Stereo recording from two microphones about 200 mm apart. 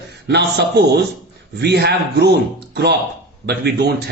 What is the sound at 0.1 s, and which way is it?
A man's voice, 55° right (ahead or behind).